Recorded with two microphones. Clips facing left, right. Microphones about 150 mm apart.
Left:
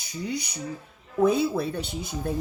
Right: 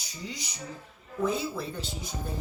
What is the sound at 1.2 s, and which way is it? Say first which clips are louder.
A woman's voice: left 8 dB; 65° left (ahead or behind).